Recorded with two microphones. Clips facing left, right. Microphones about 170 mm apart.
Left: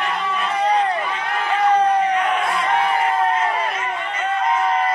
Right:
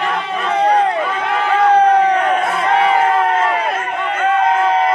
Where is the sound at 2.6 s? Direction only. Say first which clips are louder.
Right 7 dB; 85° right; by 3.8 s 70° right (ahead or behind).